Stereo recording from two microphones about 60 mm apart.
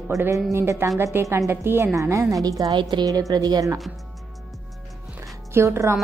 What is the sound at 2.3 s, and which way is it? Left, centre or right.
A woman's voice, right.